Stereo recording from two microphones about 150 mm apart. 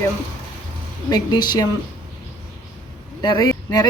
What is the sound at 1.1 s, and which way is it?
Speech, 25° left (ahead or behind).